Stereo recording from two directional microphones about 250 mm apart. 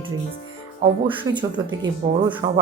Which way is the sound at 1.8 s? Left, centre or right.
Centre.